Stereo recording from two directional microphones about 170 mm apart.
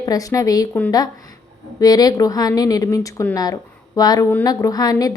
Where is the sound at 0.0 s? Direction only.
20° left (ahead or behind).